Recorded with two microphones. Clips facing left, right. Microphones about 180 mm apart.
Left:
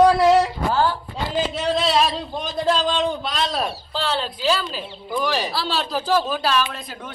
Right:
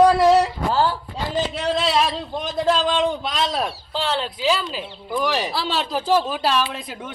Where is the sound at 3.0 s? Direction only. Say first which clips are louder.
Right 1 dB; 10° right (ahead or behind).